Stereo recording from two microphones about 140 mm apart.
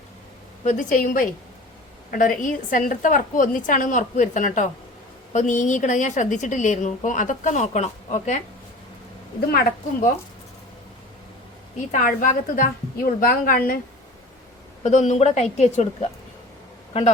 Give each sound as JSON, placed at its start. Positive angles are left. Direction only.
{"t": 0.6, "sound": "a woman's voice", "side_deg": 65}
{"t": 9.5, "sound": "a woman's voice", "side_deg": 90}
{"t": 11.9, "sound": "a woman's voice", "side_deg": 65}
{"t": 13.1, "sound": "a woman's voice", "side_deg": 85}
{"t": 14.8, "sound": "a woman's voice", "side_deg": 55}